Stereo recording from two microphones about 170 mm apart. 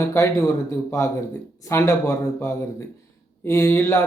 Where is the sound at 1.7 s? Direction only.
15° left (ahead or behind).